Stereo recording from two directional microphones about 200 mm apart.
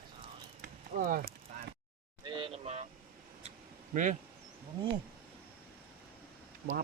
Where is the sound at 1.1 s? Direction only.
45° right (ahead or behind).